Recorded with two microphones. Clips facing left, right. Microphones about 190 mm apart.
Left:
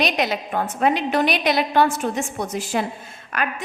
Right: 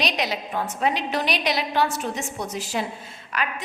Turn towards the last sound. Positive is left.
turn(degrees=50)  # may be behind; listen again after turning